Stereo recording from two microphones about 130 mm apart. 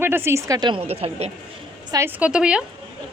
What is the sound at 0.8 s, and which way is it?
Speech, 50° right (ahead or behind).